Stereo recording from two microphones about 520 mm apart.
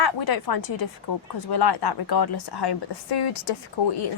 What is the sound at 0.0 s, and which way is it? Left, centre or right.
A woman's voice, left.